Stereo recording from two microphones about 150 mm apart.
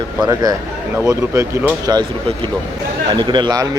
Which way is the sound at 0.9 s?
20° right (ahead or behind).